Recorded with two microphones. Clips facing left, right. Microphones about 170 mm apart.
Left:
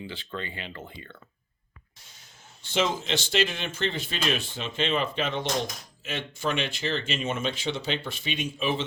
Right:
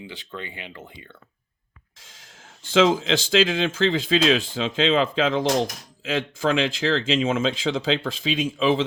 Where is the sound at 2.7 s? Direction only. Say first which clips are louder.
Right 8 dB; 90° right.